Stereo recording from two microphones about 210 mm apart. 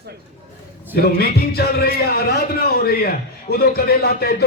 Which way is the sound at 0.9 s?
50° left (ahead or behind).